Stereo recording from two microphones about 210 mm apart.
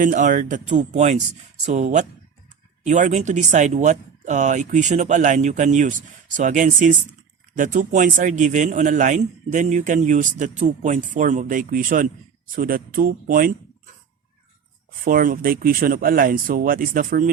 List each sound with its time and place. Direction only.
0.0 s a man's voice: 40° right (ahead or behind)
15.0 s speech: 40° right (ahead or behind)